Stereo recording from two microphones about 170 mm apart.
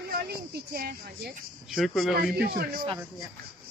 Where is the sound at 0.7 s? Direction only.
65° right (ahead or behind).